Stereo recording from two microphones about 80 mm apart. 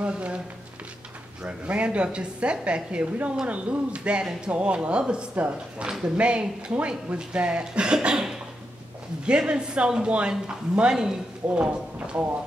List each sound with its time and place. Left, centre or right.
0.0 s speech: centre
1.4 s a woman's voice: centre